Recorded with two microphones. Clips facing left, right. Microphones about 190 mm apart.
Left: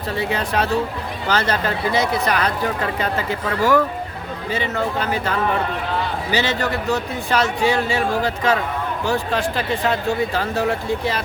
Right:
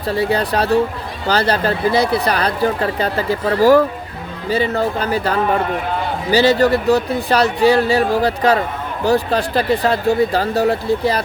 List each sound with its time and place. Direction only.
0.2 s speech: 35° right (ahead or behind)